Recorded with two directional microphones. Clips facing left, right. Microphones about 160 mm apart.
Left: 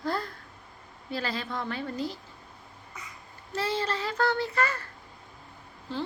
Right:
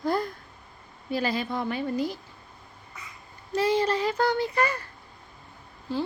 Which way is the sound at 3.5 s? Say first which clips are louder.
Right 6 dB; 15° right (ahead or behind).